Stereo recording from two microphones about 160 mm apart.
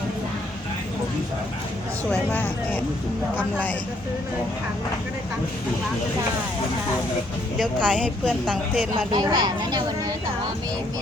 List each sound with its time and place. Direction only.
2.0 s speech: 10° left (ahead or behind)
7.6 s speech: 5° left (ahead or behind)
9.1 s speech: 25° right (ahead or behind)